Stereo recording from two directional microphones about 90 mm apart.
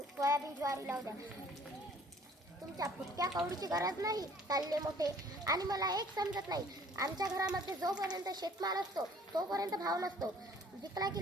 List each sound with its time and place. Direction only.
0.2 s a child's voice: 40° right (ahead or behind)
2.7 s a child's voice: 45° right (ahead or behind)
6.9 s a child's voice: 40° right (ahead or behind)